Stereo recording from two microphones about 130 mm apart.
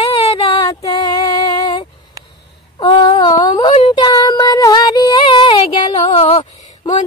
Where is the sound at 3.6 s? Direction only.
45° left (ahead or behind).